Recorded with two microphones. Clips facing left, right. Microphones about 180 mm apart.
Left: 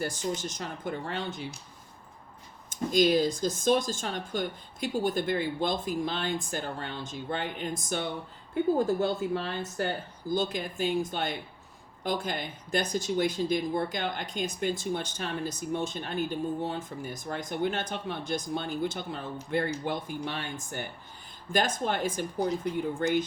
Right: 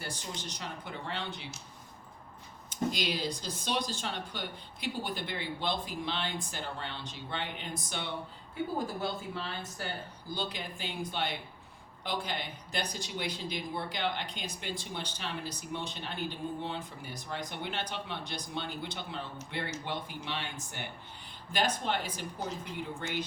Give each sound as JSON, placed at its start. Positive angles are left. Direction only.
{"t": 0.0, "sound": "speech", "side_deg": 45}
{"t": 2.6, "sound": "speech", "side_deg": 45}
{"t": 9.3, "sound": "speech", "side_deg": 50}